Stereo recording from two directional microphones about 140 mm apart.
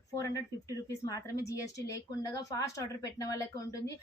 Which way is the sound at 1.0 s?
25° left (ahead or behind).